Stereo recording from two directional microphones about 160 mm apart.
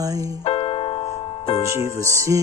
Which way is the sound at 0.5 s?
35° left (ahead or behind).